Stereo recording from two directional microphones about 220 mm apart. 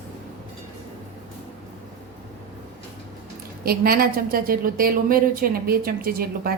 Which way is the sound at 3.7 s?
45° right (ahead or behind).